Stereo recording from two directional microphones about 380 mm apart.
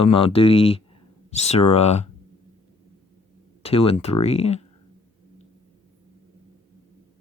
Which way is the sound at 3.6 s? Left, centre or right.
Centre.